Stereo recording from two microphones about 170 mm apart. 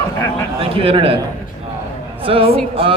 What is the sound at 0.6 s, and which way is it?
Speech, 35° right (ahead or behind).